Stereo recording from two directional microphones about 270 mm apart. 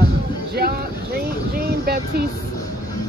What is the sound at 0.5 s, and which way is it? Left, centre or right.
Speech, right.